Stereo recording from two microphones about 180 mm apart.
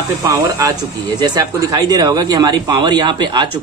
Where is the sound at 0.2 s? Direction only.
20° right (ahead or behind).